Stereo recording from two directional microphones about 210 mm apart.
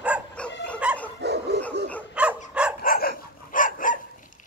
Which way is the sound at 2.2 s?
5° right (ahead or behind).